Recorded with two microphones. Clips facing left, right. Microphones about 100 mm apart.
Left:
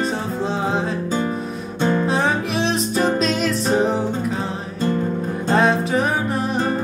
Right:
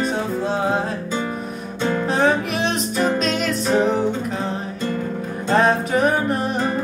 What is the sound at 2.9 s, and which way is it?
Music, 35° left (ahead or behind).